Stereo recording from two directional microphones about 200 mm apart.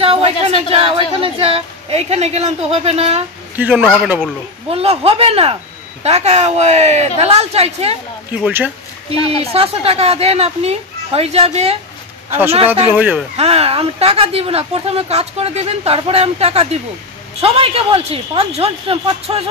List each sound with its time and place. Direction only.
0.0 s speech: 30° right (ahead or behind)
3.5 s a man's voice: 10° right (ahead or behind)
4.6 s speech: 30° right (ahead or behind)
8.5 s a man's voice: 10° right (ahead or behind)
9.4 s speech: 30° right (ahead or behind)
12.3 s a man's voice: 10° right (ahead or behind)
13.4 s speech: 30° right (ahead or behind)